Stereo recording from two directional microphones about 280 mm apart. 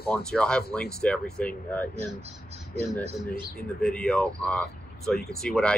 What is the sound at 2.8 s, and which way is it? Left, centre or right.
Speech, centre.